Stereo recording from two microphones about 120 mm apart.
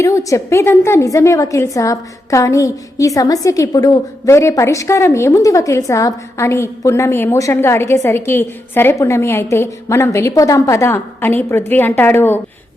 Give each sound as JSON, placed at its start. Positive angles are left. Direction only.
{"t": 0.0, "sound": "a woman's voice", "side_deg": 25}